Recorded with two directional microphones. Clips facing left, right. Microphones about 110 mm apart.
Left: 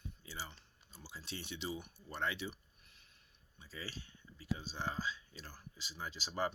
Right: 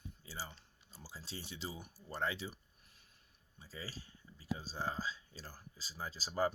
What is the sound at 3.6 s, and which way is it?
Speech, 35° right (ahead or behind).